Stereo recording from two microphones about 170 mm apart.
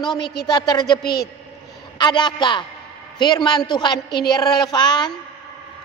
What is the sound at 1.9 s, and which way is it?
A woman's voice, 25° left (ahead or behind).